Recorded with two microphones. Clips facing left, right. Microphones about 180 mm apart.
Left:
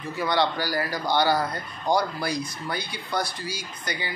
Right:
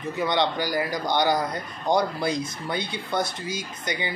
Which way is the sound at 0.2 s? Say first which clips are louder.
Even; 20° right (ahead or behind).